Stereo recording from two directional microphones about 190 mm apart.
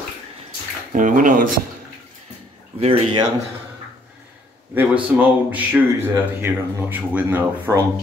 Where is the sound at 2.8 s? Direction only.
30° right (ahead or behind).